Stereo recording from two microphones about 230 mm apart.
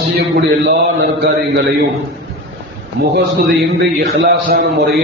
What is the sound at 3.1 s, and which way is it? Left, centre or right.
A man's voice, right.